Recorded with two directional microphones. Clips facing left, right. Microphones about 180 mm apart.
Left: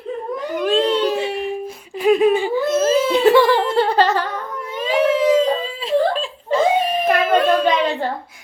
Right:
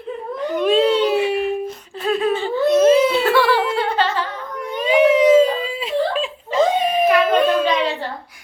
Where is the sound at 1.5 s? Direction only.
10° left (ahead or behind).